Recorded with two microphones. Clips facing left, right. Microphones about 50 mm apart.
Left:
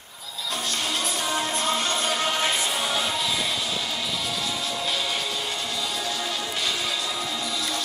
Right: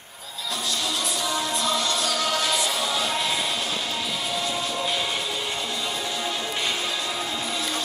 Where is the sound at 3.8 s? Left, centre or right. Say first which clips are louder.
Right 1 dB; centre; by 7.8 s right.